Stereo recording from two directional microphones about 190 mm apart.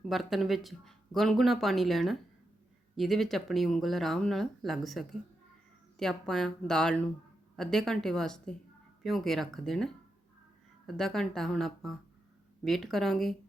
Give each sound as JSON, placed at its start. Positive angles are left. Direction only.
{"t": 0.0, "sound": "speech", "side_deg": 0}